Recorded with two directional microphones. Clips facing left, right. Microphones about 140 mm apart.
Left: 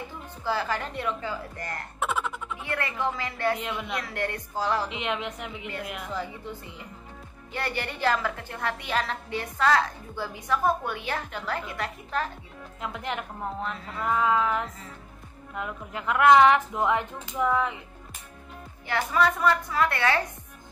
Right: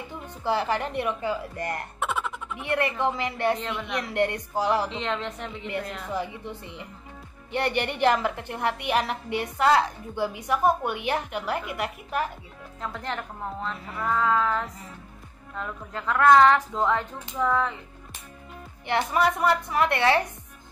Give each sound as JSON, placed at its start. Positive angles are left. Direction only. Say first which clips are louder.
{"t": 0.4, "sound": "speech", "louder": "right 3 dB", "side_deg": -20}
{"t": 2.0, "sound": "a sound", "louder": "left 5 dB", "side_deg": 0}
{"t": 2.6, "sound": "speech", "louder": "right 5 dB", "side_deg": -20}
{"t": 3.5, "sound": "a woman's voice", "louder": "right 1 dB", "side_deg": 15}
{"t": 3.9, "sound": "speech", "louder": "right 10 dB", "side_deg": -20}
{"t": 4.8, "sound": "a woman's voice", "louder": "right 1 dB", "side_deg": 15}
{"t": 7.5, "sound": "a woman's voice", "louder": "right 6 dB", "side_deg": -20}
{"t": 12.8, "sound": "a woman's voice", "louder": "even", "side_deg": 15}
{"t": 18.9, "sound": "speech", "louder": "right 1 dB", "side_deg": -25}